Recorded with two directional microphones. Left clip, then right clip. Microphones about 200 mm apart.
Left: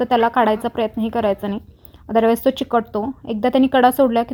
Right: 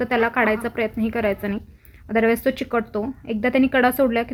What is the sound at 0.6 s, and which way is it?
Speech, 35° left (ahead or behind).